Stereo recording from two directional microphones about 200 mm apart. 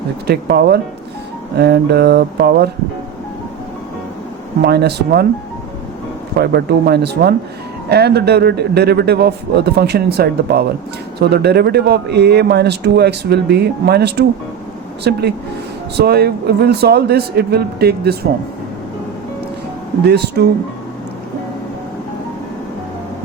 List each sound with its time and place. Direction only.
0.3 s speech: 55° right (ahead or behind)
4.6 s speech: 55° right (ahead or behind)
6.4 s speech: 55° right (ahead or behind)
20.1 s speech: 55° right (ahead or behind)